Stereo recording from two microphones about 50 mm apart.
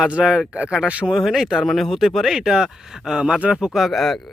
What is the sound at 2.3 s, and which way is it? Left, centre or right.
Speech, centre.